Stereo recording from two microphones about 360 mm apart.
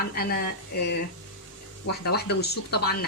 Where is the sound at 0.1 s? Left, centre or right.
Left.